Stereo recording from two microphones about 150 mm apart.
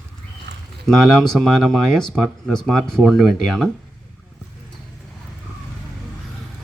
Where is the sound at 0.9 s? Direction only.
5° left (ahead or behind).